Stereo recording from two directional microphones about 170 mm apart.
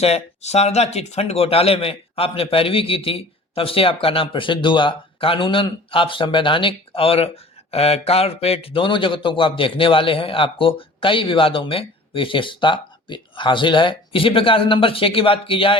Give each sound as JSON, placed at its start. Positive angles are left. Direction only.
{"t": 0.0, "sound": "a man's voice", "side_deg": 40}